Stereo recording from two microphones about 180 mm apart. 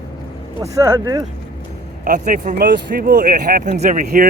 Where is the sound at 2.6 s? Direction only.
60° right (ahead or behind).